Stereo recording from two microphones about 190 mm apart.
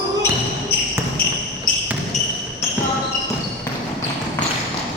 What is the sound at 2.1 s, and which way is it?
Basketball bounce, 40° left (ahead or behind).